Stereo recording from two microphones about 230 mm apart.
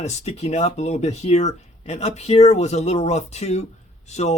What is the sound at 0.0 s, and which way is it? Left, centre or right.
Speech, left.